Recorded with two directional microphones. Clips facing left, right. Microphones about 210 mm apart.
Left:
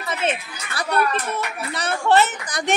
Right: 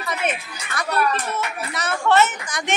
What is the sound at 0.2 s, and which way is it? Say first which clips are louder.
A woman's voice: left 1 dB; 25° left (ahead or behind).